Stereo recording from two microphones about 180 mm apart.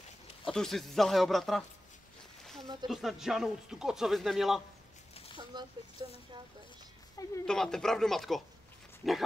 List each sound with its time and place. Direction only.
0.5 s speech: centre (ahead or behind)
2.6 s speech: 25° right (ahead or behind)
2.9 s speech: centre (ahead or behind)
5.4 s speech: 25° right (ahead or behind)
7.4 s speech: 5° left (ahead or behind)